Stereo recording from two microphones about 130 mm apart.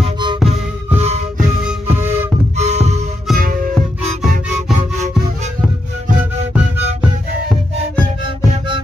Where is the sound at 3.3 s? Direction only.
90° right.